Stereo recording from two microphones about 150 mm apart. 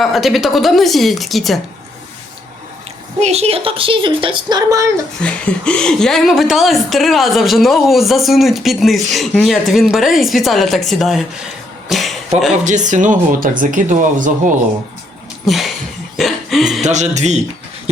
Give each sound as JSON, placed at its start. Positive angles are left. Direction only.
{"t": 0.0, "sound": "a woman's voice", "side_deg": 0}
{"t": 3.2, "sound": "a woman's voice", "side_deg": -45}
{"t": 5.2, "sound": "a woman's voice", "side_deg": 5}
{"t": 11.9, "sound": "a sound", "side_deg": 0}
{"t": 12.6, "sound": "speech", "side_deg": -55}
{"t": 15.4, "sound": "a woman's voice", "side_deg": 0}
{"t": 16.1, "sound": "a sound", "side_deg": 0}
{"t": 16.8, "sound": "music", "side_deg": -50}